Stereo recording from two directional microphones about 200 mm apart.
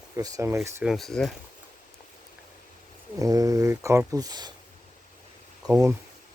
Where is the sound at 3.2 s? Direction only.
15° right (ahead or behind).